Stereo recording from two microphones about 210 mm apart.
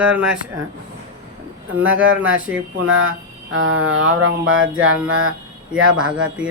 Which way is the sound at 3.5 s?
70° right (ahead or behind).